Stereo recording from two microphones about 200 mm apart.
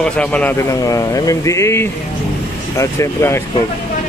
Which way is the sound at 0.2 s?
5° left (ahead or behind).